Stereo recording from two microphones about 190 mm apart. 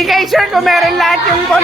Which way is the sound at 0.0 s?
Centre (ahead or behind).